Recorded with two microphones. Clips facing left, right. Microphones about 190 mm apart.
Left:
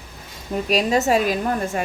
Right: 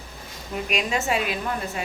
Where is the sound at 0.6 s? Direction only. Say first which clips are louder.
Left 7 dB; 35° left (ahead or behind).